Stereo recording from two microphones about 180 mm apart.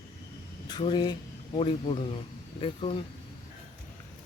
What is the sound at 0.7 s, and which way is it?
Speech, 25° left (ahead or behind).